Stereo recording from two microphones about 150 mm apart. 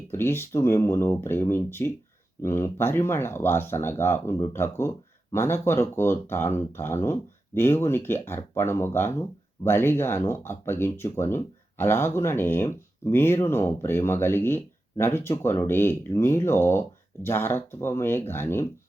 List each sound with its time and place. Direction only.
0.1 s speech: 15° left (ahead or behind)